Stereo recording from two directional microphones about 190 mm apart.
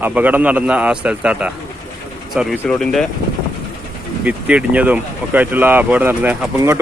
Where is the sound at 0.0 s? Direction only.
10° right (ahead or behind).